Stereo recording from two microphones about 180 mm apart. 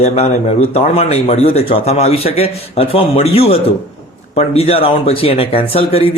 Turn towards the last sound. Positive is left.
turn(degrees=30)  # may be behind; listen again after turning